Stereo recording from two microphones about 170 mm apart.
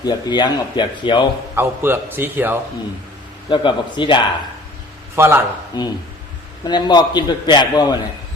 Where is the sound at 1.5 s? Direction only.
15° right (ahead or behind).